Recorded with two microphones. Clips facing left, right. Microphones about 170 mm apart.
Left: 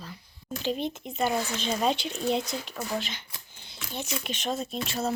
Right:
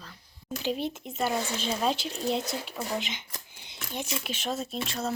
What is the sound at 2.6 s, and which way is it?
Speech, 20° right (ahead or behind).